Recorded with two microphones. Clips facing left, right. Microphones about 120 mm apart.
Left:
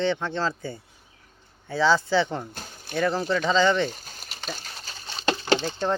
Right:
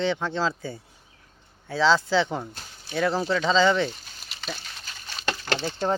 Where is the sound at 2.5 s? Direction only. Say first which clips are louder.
Left 2 dB; 50° left (ahead or behind).